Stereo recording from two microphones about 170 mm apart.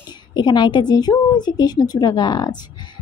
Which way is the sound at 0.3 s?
25° left (ahead or behind).